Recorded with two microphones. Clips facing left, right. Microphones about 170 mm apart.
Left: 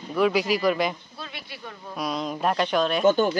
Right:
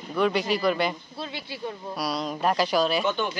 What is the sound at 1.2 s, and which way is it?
Speech, 25° right (ahead or behind).